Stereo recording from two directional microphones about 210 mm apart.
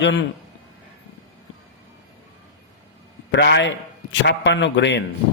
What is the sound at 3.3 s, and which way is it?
Speech, 55° left (ahead or behind).